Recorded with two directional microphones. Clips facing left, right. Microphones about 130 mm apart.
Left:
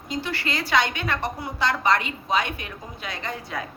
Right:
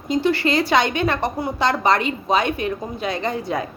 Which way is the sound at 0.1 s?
20° right (ahead or behind).